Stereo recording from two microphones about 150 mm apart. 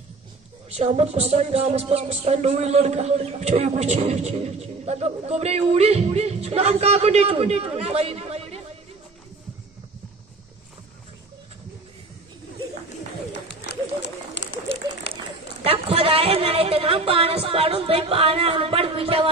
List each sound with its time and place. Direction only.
0.7 s music: 45° right (ahead or behind)
15.1 s run: 90° left
15.6 s a sound: 40° right (ahead or behind)